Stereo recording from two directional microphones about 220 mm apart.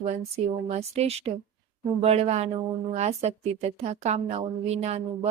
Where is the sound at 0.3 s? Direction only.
30° right (ahead or behind).